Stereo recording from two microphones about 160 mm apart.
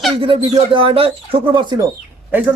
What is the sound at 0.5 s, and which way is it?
A man's voice, 35° right (ahead or behind).